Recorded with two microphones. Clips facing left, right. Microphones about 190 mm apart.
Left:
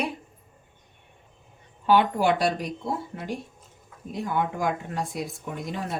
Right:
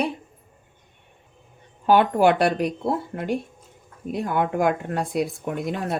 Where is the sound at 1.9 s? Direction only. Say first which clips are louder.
Right 4 dB; 50° right (ahead or behind).